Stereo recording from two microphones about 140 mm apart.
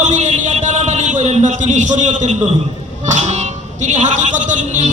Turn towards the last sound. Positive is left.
turn(degrees=-60)  # may be behind; listen again after turning